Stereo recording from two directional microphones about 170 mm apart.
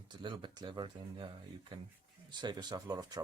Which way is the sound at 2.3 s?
25° right (ahead or behind).